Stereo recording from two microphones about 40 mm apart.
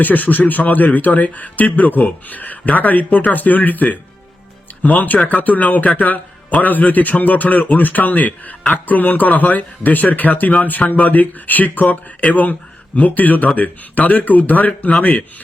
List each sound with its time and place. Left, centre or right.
0.0 s speech: left